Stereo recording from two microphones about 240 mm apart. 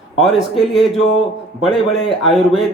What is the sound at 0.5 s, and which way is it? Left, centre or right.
Speech, centre.